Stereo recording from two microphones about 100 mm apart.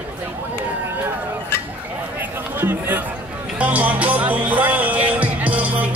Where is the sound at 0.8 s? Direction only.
20° right (ahead or behind).